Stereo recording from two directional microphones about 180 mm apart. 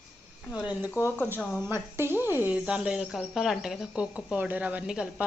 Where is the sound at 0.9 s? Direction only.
10° left (ahead or behind).